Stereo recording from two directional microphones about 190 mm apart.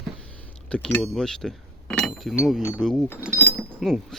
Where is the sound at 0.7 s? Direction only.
5° left (ahead or behind).